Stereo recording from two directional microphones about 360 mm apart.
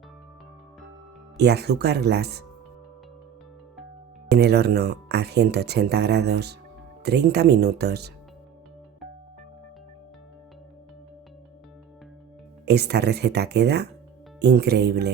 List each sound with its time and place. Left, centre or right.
1.4 s speech: right
4.3 s speech: right
12.6 s speech: right